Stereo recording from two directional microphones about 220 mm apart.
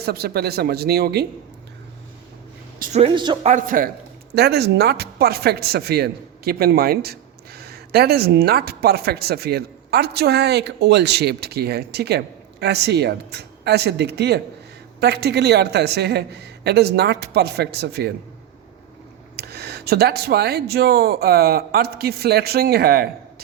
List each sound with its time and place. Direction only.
0.0 s speech: 45° right (ahead or behind)
2.7 s speech: 40° right (ahead or behind)
3.0 s speech: 20° right (ahead or behind)
3.4 s a man's voice: 35° right (ahead or behind)
4.4 s speech: 45° right (ahead or behind)
19.4 s speech: 45° right (ahead or behind)